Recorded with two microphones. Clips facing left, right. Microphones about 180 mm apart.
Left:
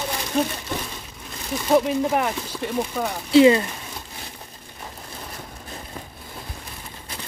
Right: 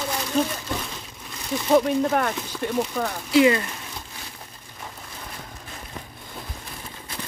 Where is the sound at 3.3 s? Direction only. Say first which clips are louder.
Left 4 dB; 25° left (ahead or behind).